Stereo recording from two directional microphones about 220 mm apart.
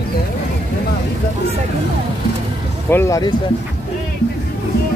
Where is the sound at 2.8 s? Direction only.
10° left (ahead or behind).